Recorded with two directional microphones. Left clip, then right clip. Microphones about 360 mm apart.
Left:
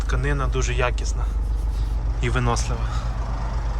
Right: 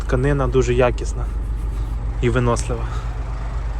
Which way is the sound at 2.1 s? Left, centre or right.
Centre.